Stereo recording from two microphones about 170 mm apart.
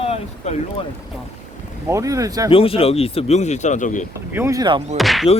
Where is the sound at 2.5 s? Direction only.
35° left (ahead or behind).